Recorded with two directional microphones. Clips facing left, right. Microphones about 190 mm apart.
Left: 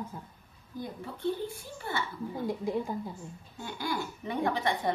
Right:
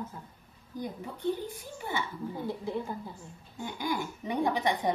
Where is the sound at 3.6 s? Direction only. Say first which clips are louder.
Right 1 dB; 15° right (ahead or behind).